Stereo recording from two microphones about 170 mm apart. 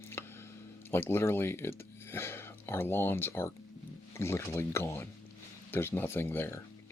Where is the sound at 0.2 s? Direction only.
15° left (ahead or behind).